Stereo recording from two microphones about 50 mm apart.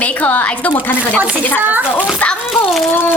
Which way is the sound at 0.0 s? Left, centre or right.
Left.